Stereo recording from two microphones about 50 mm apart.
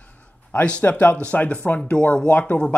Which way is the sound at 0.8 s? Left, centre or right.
Left.